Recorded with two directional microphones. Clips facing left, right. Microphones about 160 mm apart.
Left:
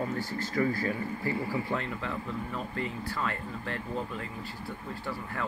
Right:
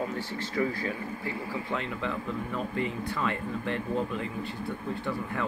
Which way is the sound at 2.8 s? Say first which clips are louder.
Right 2 dB; 20° right (ahead or behind).